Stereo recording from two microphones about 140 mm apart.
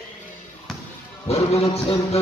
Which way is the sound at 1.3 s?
45° left (ahead or behind).